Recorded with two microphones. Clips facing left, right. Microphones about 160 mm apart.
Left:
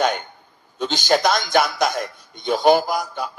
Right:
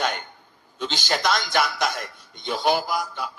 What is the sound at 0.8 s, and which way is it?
A man's voice, 45° left (ahead or behind).